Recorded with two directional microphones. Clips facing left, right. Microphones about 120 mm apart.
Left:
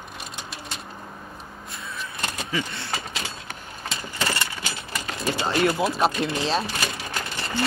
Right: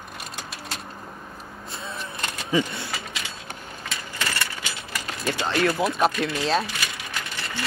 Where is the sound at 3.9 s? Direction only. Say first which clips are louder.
Left 3 dB; 30° left (ahead or behind).